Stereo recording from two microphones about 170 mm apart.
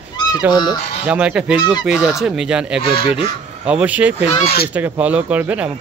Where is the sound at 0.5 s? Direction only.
25° left (ahead or behind).